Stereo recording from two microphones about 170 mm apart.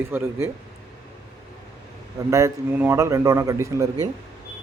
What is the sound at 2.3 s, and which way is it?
A man's voice, 15° right (ahead or behind).